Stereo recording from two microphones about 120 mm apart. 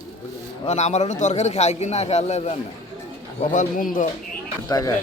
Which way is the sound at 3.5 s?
90° left.